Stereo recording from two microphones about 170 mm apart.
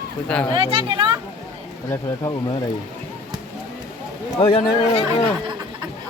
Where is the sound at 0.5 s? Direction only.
30° right (ahead or behind).